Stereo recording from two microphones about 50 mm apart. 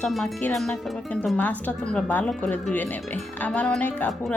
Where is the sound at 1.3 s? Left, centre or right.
Left.